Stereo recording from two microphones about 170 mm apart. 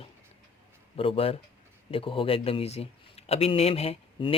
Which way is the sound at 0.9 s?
35° left (ahead or behind).